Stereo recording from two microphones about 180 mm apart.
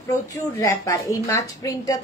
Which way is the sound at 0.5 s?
15° left (ahead or behind).